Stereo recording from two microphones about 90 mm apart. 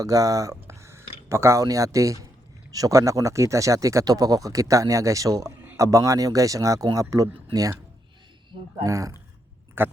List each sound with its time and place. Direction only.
0.0 s speech: 40° right (ahead or behind)
8.8 s speech: 40° right (ahead or behind)
9.8 s speech: 25° right (ahead or behind)